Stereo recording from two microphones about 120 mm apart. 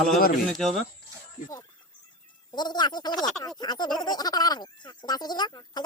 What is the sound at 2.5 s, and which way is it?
Speech, 35° left (ahead or behind).